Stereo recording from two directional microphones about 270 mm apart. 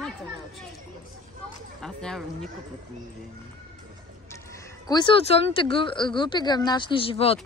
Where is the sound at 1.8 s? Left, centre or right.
Centre.